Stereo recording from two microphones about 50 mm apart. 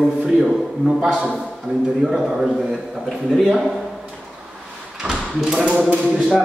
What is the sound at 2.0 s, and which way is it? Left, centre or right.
Speech, centre.